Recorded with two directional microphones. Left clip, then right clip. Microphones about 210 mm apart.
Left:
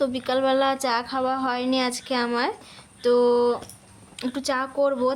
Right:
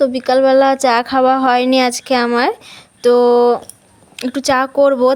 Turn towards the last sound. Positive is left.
turn(degrees=-35)  # may be behind; listen again after turning